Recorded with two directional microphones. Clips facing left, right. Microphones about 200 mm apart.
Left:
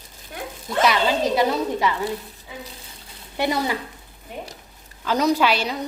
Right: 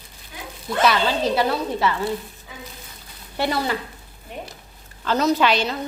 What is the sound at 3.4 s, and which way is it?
Speech, 15° left (ahead or behind).